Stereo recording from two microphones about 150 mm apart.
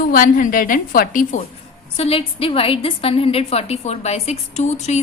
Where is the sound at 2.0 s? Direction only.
40° left (ahead or behind).